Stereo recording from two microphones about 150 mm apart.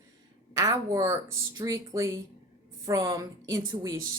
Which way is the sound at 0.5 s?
20° right (ahead or behind).